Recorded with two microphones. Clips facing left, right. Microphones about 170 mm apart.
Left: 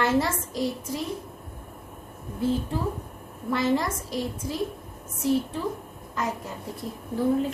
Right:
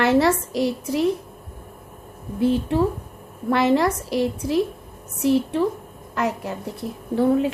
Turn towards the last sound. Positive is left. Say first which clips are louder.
# right 5 dB
turn(degrees=-70)  # may be behind; listen again after turning